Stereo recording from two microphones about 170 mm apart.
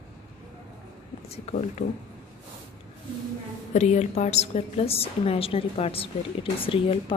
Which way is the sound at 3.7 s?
40° left (ahead or behind).